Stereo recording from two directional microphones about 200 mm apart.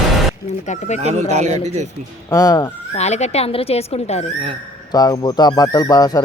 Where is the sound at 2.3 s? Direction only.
20° left (ahead or behind).